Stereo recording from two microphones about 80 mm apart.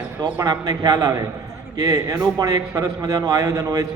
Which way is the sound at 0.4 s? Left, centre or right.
Right.